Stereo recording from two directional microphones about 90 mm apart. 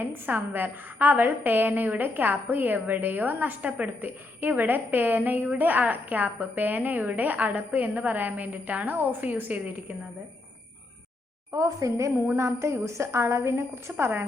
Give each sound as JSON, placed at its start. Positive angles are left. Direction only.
{"t": 0.0, "sound": "a woman's voice", "side_deg": -20}
{"t": 11.5, "sound": "a woman's voice", "side_deg": -40}